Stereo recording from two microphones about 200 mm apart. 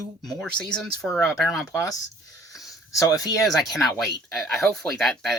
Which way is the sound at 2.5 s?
Centre (ahead or behind).